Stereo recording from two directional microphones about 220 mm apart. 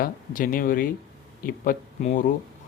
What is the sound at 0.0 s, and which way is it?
A man's voice, 40° left (ahead or behind).